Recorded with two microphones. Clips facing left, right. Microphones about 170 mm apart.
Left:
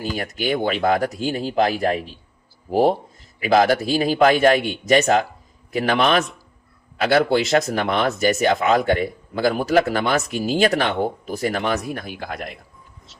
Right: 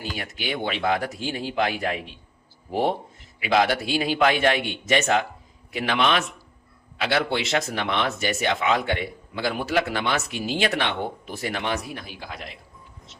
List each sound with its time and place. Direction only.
0.0 s a man's voice: 45° left (ahead or behind)